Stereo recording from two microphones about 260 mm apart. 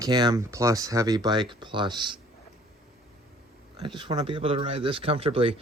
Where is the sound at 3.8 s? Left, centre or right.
Centre.